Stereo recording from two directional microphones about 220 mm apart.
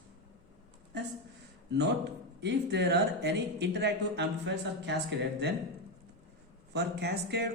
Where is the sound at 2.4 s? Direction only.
50° right (ahead or behind).